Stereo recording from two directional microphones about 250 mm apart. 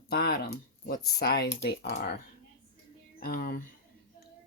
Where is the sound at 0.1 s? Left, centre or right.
Left.